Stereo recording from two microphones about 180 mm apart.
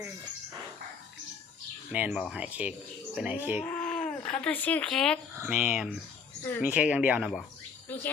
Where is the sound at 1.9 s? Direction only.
5° right (ahead or behind).